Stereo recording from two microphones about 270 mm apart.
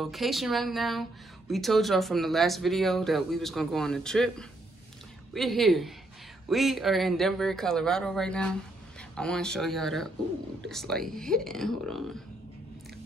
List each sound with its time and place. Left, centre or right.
0.0 s speech: centre